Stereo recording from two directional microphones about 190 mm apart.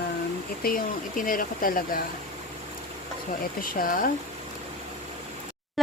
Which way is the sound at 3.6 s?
45° left (ahead or behind).